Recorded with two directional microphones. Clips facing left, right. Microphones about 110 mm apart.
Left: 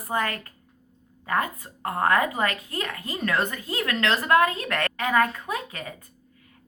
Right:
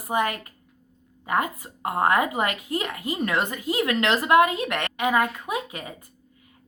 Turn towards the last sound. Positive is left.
turn(degrees=-20)  # may be behind; listen again after turning